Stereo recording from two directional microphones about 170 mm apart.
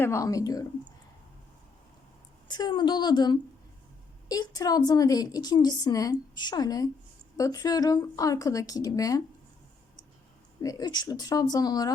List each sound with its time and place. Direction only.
0.0 s a woman's voice: 15° left (ahead or behind)
2.5 s a woman's voice: 25° left (ahead or behind)
10.6 s a woman's voice: 20° left (ahead or behind)